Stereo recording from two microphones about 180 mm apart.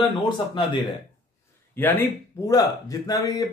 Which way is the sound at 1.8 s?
10° left (ahead or behind).